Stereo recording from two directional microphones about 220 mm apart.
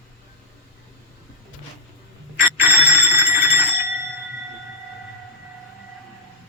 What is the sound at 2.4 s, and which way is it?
Music, 10° right (ahead or behind).